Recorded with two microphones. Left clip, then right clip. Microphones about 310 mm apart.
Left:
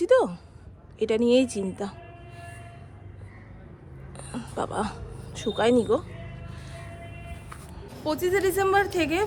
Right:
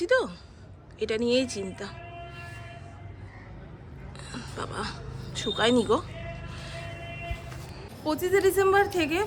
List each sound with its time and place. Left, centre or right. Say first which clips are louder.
0.0 s a sound: left 4 dB; centre
0.9 s speech: left 4 dB; centre
4.2 s speech: left 5 dB; centre
6.5 s music: right 4 dB; centre
8.0 s speech: even; centre